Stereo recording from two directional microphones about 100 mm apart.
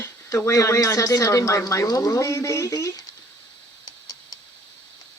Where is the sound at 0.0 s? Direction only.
30° left (ahead or behind).